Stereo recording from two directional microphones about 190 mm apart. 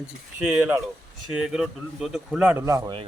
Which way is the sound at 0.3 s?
5° right (ahead or behind).